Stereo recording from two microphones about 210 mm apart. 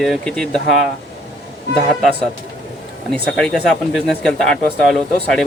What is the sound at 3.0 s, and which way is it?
Speech, 5° left (ahead or behind).